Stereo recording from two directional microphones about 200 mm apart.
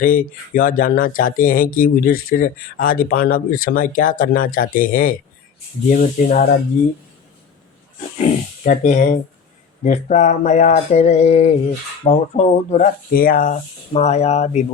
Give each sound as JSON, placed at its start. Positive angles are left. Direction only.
{"t": 0.0, "sound": "speech", "side_deg": 45}
{"t": 8.2, "sound": "speech", "side_deg": 35}